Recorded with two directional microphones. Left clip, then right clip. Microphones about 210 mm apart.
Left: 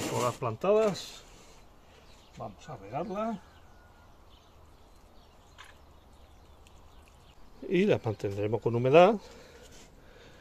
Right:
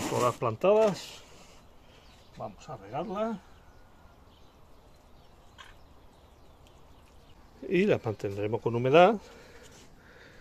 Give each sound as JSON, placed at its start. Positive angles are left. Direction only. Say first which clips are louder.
{"t": 0.2, "sound": "speech", "louder": "right 6 dB", "side_deg": -30}
{"t": 2.3, "sound": "speech", "louder": "right 2 dB", "side_deg": -15}
{"t": 7.6, "sound": "speech", "louder": "right 1 dB", "side_deg": 0}